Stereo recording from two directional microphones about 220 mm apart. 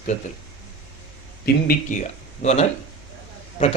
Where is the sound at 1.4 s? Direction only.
40° left (ahead or behind).